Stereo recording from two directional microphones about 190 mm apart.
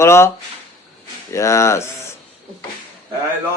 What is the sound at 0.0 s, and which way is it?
Speech, 15° left (ahead or behind).